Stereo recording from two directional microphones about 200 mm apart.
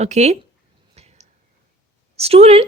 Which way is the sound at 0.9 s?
35° right (ahead or behind).